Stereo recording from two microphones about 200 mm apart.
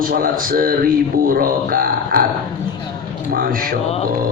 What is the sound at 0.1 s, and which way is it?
Speech, 45° right (ahead or behind).